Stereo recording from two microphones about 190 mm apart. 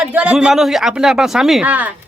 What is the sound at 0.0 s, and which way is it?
A woman's voice, 5° right (ahead or behind).